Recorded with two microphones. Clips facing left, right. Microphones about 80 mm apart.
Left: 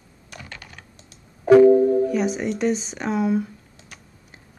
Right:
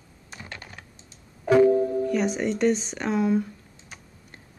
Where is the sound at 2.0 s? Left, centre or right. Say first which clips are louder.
Left 2 dB; centre.